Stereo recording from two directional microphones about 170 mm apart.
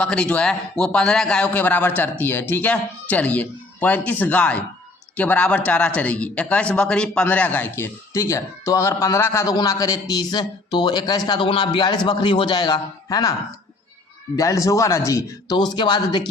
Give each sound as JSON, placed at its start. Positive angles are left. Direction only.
{"t": 0.0, "sound": "a man's voice", "side_deg": 5}
{"t": 14.3, "sound": "a man's voice", "side_deg": 20}